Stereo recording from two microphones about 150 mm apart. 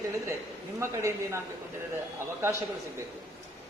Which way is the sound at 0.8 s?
20° right (ahead or behind).